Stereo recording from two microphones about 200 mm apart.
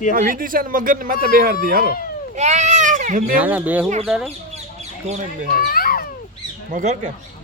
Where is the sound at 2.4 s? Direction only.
35° right (ahead or behind).